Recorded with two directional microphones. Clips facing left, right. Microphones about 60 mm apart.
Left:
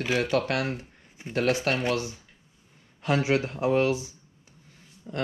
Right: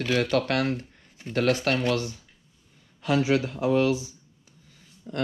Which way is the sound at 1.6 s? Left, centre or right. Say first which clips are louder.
Right 1 dB; left.